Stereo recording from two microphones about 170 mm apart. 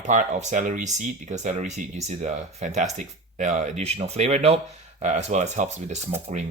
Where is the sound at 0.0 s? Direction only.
45° right (ahead or behind).